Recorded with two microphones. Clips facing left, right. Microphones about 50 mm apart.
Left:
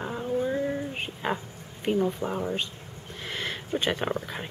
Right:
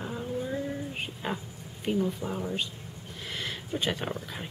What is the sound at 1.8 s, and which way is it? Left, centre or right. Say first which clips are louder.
Speech: left 3 dB; left.